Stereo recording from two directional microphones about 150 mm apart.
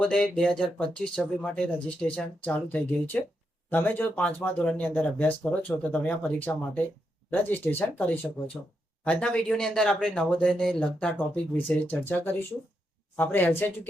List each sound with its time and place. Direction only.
0.0 s speech: 5° left (ahead or behind)